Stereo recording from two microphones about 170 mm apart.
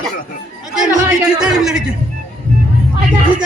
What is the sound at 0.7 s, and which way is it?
Chatter, 5° right (ahead or behind).